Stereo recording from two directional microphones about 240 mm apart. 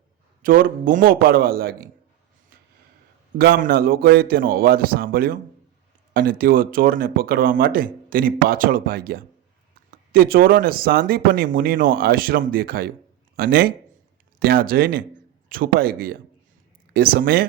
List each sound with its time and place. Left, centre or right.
0.4 s speech: right
3.3 s speech: right